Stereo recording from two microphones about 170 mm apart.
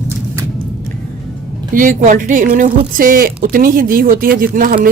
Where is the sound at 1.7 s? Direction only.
50° right (ahead or behind).